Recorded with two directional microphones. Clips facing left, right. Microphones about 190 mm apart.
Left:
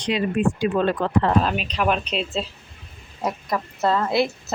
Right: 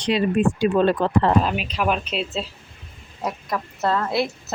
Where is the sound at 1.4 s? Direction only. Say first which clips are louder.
Even; 5° right (ahead or behind).